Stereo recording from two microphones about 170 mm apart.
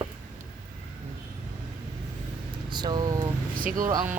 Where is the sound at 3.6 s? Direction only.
55° right (ahead or behind).